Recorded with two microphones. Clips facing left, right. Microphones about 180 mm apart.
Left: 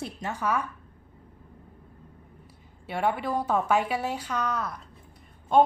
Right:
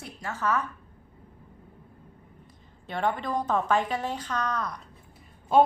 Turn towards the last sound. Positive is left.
turn(degrees=-5)  # may be behind; listen again after turning